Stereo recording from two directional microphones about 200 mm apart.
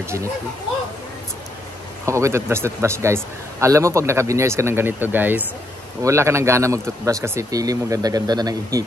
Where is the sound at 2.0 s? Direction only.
15° right (ahead or behind).